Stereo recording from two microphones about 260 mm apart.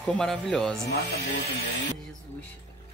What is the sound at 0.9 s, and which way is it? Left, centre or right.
Speech, left.